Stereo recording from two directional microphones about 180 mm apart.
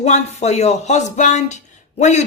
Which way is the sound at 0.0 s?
40° left (ahead or behind).